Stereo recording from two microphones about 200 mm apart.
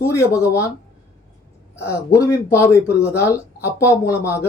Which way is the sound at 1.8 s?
15° left (ahead or behind).